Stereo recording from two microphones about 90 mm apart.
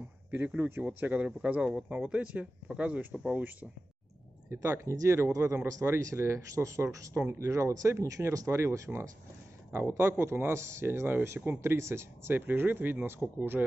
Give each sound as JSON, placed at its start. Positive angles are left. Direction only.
{"t": 0.3, "sound": "speech", "side_deg": -20}
{"t": 4.5, "sound": "speech", "side_deg": -30}